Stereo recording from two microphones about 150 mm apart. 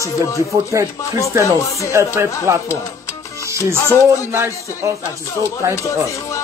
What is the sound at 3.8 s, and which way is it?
A man's voice, 15° right (ahead or behind).